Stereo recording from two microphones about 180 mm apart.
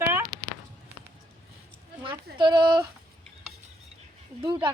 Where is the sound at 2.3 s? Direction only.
25° right (ahead or behind).